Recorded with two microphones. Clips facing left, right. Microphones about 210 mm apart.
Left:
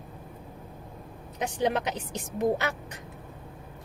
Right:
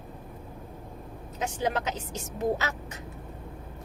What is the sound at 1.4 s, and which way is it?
A woman's voice, 15° left (ahead or behind).